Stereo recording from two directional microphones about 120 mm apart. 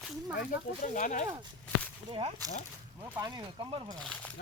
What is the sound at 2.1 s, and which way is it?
Speech, 50° right (ahead or behind).